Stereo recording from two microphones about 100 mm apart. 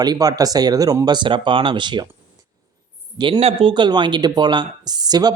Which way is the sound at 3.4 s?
80° right.